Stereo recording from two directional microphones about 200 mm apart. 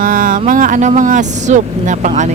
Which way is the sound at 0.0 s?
45° right (ahead or behind).